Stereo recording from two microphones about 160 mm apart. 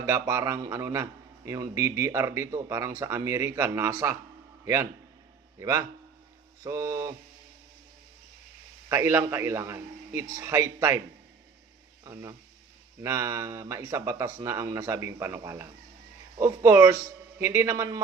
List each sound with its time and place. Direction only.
0.0 s a man's voice: 20° right (ahead or behind)
8.9 s speech: 15° right (ahead or behind)
12.0 s speech: 20° right (ahead or behind)